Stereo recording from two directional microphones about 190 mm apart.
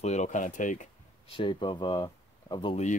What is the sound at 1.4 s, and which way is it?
Speech, 25° left (ahead or behind).